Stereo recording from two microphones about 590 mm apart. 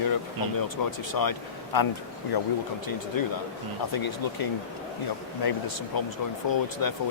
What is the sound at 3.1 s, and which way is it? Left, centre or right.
Speech, left.